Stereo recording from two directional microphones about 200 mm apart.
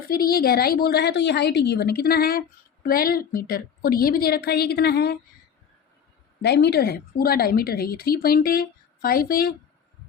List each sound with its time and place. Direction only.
0.1 s a woman's voice: 50° left (ahead or behind)
6.4 s a woman's voice: 55° left (ahead or behind)